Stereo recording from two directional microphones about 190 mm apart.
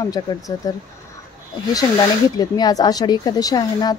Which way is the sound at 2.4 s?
20° left (ahead or behind).